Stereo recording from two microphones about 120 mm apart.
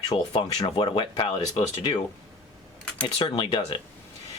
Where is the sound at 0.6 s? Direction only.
40° left (ahead or behind).